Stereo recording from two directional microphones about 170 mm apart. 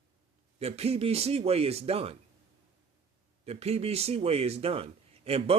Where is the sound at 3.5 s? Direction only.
40° right (ahead or behind).